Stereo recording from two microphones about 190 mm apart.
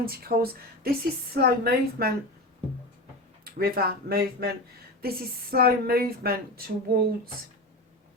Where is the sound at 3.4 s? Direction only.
55° right (ahead or behind).